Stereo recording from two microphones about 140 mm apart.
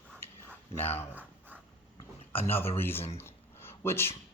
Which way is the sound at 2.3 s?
15° left (ahead or behind).